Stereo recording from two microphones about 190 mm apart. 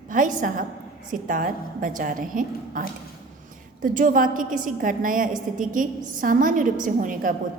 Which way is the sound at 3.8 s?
45° right (ahead or behind).